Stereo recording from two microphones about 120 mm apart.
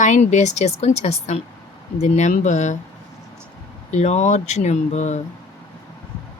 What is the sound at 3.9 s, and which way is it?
A woman's voice, 70° left (ahead or behind).